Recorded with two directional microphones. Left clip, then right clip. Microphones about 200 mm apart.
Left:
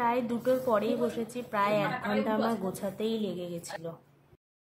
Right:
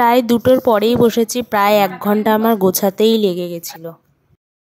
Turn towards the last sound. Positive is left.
turn(degrees=-45)  # may be behind; listen again after turning